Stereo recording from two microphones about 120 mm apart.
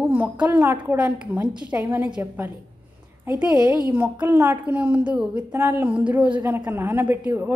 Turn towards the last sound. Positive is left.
turn(degrees=-15)  # may be behind; listen again after turning